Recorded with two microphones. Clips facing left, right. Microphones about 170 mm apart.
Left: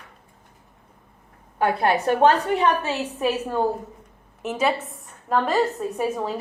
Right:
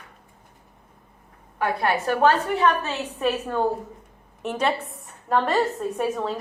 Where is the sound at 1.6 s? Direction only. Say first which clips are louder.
Left 3 dB; 25° left (ahead or behind).